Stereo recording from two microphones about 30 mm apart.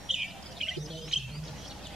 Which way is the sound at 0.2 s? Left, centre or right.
Centre.